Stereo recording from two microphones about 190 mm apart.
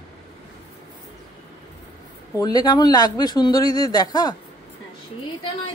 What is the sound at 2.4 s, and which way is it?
Speech, 20° left (ahead or behind).